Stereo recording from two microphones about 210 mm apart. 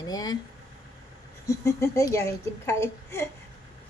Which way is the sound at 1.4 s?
15° left (ahead or behind).